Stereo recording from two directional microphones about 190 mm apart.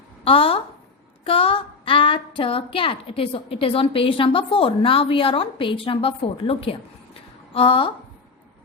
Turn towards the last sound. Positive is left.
turn(degrees=30)  # may be behind; listen again after turning